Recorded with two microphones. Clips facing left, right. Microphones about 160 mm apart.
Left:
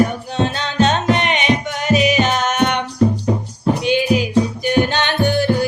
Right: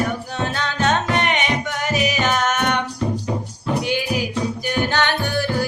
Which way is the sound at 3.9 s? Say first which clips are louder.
Left 6 dB; 20° left (ahead or behind).